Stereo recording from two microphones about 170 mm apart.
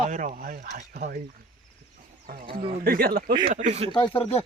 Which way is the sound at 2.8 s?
60° right (ahead or behind).